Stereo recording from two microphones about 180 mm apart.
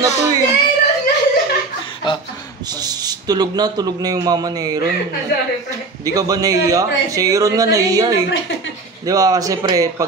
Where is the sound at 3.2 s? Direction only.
20° right (ahead or behind).